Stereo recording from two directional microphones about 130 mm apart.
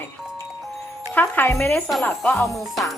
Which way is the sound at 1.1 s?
15° left (ahead or behind).